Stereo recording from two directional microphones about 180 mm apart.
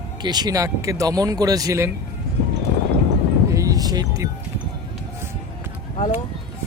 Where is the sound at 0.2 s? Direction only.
25° right (ahead or behind).